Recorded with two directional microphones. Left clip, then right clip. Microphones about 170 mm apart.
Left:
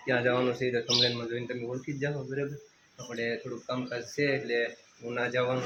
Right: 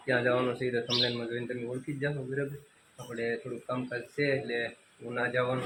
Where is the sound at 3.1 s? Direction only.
10° left (ahead or behind).